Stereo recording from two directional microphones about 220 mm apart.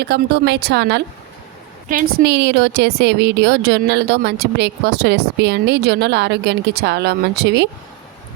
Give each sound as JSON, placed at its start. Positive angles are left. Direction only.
{"t": 0.0, "sound": "a woman's voice", "side_deg": -50}